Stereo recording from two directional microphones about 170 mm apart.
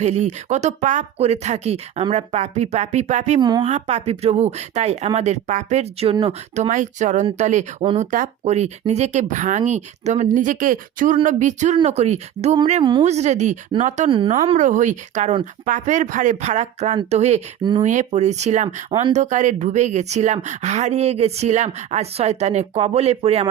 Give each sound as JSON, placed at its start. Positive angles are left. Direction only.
{"t": 0.0, "sound": "a woman's voice", "side_deg": -40}
{"t": 17.6, "sound": "speech", "side_deg": -25}
{"t": 17.8, "sound": "a woman's voice", "side_deg": -45}